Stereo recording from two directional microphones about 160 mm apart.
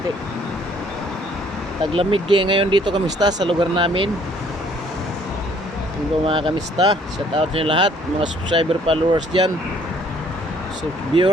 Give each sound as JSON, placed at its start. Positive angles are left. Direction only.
{"t": 1.8, "sound": "speech", "side_deg": -35}
{"t": 6.2, "sound": "speech", "side_deg": -35}